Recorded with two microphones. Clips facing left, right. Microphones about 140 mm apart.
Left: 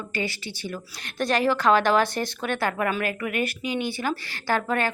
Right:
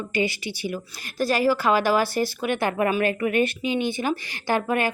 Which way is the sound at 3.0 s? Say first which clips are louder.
Right 5 dB; 30° right (ahead or behind).